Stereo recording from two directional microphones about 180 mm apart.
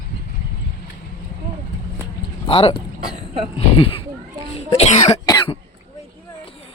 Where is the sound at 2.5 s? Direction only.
30° left (ahead or behind).